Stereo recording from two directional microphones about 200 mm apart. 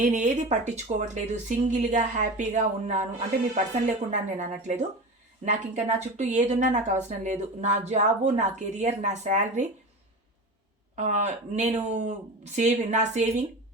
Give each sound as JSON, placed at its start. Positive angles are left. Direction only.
{"t": 0.0, "sound": "speech", "side_deg": -40}
{"t": 4.1, "sound": "speech", "side_deg": -35}
{"t": 10.9, "sound": "speech", "side_deg": -35}